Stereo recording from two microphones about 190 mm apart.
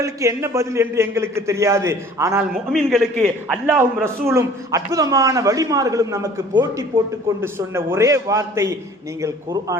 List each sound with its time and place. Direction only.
0.0 s a man's voice: 15° right (ahead or behind)
2.7 s a man's voice: centre (ahead or behind)
3.7 s a man's voice: 10° right (ahead or behind)
7.4 s a man's voice: 15° right (ahead or behind)